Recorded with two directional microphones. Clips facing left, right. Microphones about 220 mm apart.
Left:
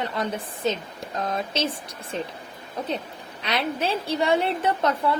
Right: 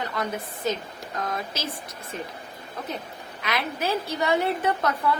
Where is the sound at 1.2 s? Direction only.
25° left (ahead or behind).